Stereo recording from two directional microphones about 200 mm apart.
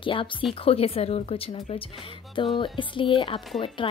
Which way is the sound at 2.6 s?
25° left (ahead or behind).